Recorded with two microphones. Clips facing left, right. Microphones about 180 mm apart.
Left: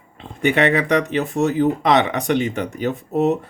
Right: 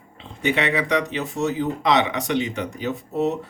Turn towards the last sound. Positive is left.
turn(degrees=55)  # may be behind; listen again after turning